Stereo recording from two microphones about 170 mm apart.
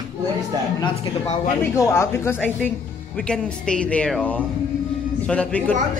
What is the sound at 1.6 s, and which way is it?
Speech, 15° left (ahead or behind).